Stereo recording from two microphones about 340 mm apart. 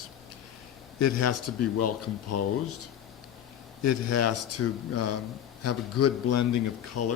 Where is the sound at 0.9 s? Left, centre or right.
Left.